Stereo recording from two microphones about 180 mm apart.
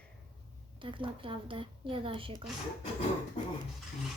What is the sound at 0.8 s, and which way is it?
A woman's voice, 30° right (ahead or behind).